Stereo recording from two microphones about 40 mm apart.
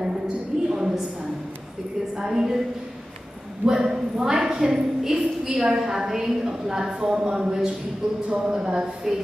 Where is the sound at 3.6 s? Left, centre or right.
Centre.